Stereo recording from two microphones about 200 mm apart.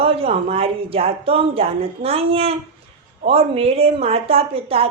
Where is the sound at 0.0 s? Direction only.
30° right (ahead or behind).